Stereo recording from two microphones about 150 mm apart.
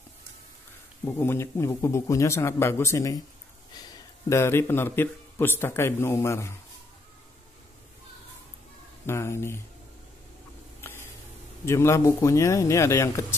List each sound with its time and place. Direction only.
1.0 s a man's voice: 15° left (ahead or behind)
9.0 s speech: 15° left (ahead or behind)
10.8 s a sound: 15° left (ahead or behind)
11.6 s speech: 20° left (ahead or behind)